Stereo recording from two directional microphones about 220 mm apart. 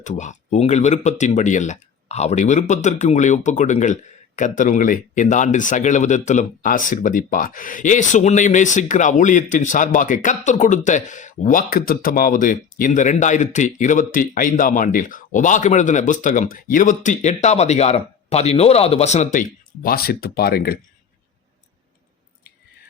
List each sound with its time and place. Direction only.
0.0 s speech: 35° left (ahead or behind)